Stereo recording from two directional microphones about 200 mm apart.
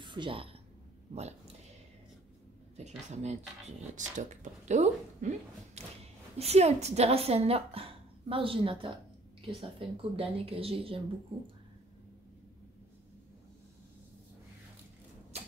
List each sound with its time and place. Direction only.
0.0 s a woman's voice: 25° right (ahead or behind)
3.1 s a woman's voice: 35° right (ahead or behind)